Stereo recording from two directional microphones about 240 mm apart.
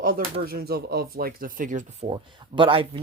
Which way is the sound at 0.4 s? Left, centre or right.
Right.